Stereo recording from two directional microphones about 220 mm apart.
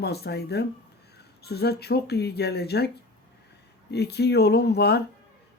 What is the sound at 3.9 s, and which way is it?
Speech, 50° left (ahead or behind).